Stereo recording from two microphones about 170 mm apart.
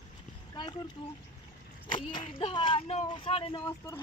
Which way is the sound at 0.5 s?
25° left (ahead or behind).